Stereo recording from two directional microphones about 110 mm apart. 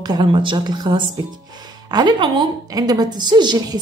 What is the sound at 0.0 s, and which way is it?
A woman's voice, 40° right (ahead or behind).